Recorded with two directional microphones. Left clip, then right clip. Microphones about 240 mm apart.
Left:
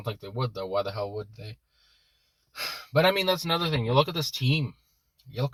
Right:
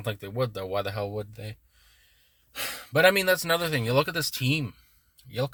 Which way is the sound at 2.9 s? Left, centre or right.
Right.